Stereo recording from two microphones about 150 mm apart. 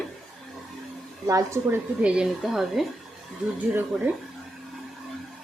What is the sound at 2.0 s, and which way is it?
Speech, 5° right (ahead or behind).